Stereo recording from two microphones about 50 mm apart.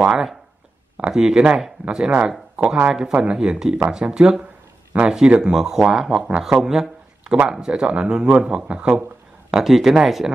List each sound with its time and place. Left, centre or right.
0.0 s speech: centre
6.6 s a sound: centre
7.4 s speech: centre